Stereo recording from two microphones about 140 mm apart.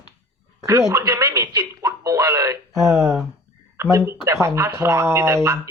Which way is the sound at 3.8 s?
20° right (ahead or behind).